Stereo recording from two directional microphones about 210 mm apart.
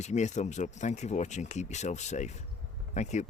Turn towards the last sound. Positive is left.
turn(degrees=35)  # may be behind; listen again after turning